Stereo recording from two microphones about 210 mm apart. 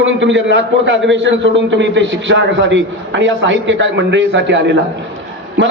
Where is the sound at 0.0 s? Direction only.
60° right (ahead or behind).